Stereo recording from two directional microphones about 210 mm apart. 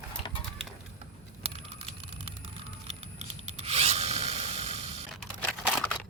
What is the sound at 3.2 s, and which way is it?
Rub, 30° right (ahead or behind).